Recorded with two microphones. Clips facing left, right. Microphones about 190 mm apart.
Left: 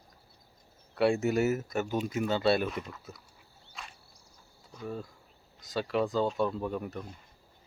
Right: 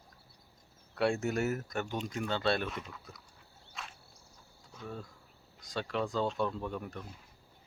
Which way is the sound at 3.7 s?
Centre (ahead or behind).